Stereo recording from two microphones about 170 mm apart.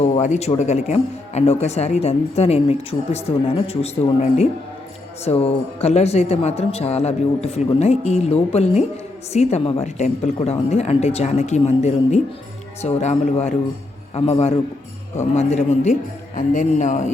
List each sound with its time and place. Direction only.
0.0 s a man's voice: 45° left (ahead or behind)